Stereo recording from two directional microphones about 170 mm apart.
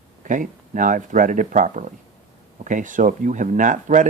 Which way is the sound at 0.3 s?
50° right (ahead or behind).